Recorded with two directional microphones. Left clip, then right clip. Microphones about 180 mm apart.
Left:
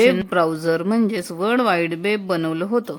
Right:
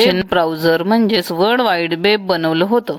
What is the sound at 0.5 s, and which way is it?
A woman's voice, 10° left (ahead or behind).